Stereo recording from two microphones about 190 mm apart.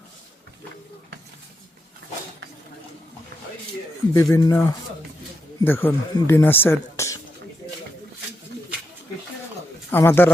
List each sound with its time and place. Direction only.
4.1 s speech: 15° left (ahead or behind)
9.9 s speech: 10° left (ahead or behind)